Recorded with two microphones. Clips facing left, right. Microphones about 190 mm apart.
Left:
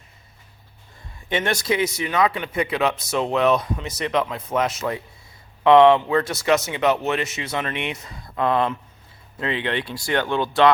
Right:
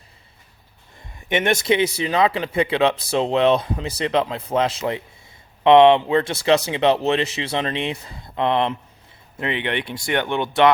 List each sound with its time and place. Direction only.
1.3 s speech: 20° right (ahead or behind)